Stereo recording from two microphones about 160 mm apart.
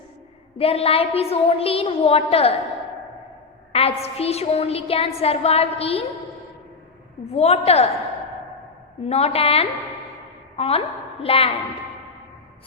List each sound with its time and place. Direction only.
0.6 s a woman's voice: 40° left (ahead or behind)
3.7 s a woman's voice: 40° left (ahead or behind)
7.3 s a woman's voice: 40° left (ahead or behind)
9.0 s a woman's voice: 40° left (ahead or behind)